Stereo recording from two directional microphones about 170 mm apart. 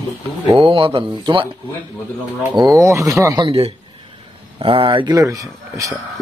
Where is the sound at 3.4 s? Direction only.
35° right (ahead or behind).